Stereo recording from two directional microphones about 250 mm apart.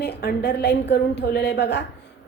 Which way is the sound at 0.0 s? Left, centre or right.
Left.